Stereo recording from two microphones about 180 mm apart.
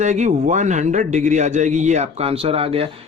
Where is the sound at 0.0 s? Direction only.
40° right (ahead or behind).